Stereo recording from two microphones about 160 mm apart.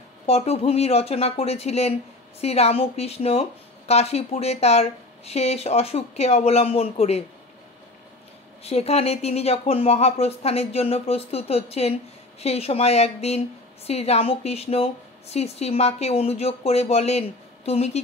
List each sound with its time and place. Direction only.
0.3 s speech: 40° left (ahead or behind)
8.6 s speech: 40° left (ahead or behind)